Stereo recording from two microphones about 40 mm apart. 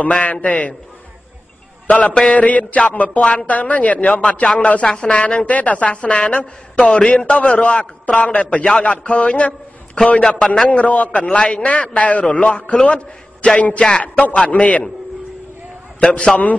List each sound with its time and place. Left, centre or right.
0.0 s a man's voice: left
1.9 s a man's voice: left
4.8 s a woman's voice: left
10.2 s a man's voice: centre
10.7 s a man's voice: left
11.2 s a man's voice: left
16.0 s a woman's voice: left